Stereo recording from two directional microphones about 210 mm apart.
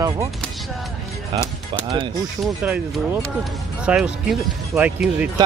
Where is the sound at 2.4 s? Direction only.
5° right (ahead or behind).